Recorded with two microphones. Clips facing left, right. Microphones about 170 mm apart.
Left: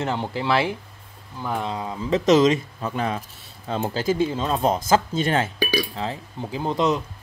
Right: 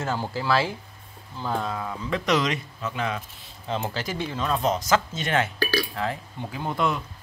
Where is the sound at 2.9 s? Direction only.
40° left (ahead or behind).